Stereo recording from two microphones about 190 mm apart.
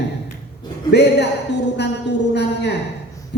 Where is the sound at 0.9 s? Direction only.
65° left (ahead or behind).